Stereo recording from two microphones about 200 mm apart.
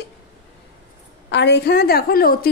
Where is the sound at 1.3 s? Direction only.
60° left (ahead or behind).